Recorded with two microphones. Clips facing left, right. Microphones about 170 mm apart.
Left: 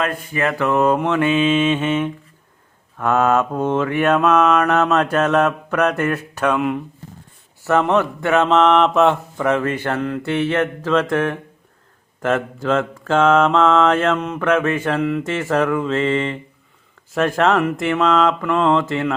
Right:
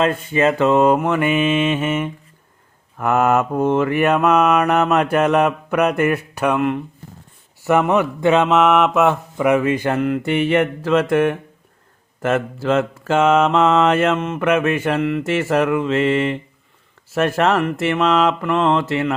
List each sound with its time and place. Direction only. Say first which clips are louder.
0.0 s mantra: right 5 dB; 25° right (ahead or behind)
6.6 s speech: right 1 dB; centre (ahead or behind)
7.6 s mantra: right 1 dB; 10° right (ahead or behind)
17.1 s speech: even; 5° right (ahead or behind)